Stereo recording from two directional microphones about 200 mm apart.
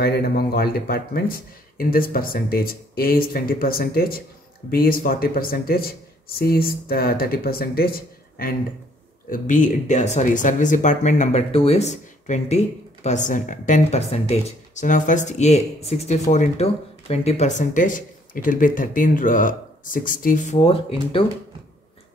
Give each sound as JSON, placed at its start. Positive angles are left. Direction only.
{"t": 0.0, "sound": "speech", "side_deg": 50}